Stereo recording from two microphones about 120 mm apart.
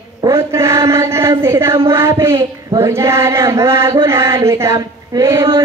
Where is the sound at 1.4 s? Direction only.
20° right (ahead or behind).